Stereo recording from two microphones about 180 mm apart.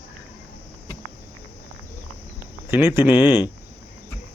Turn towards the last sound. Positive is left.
turn(degrees=-10)  # may be behind; listen again after turning